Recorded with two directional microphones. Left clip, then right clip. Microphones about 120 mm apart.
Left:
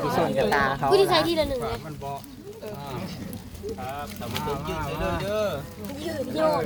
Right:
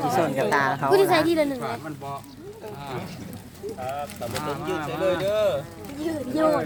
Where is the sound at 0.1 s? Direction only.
20° right (ahead or behind).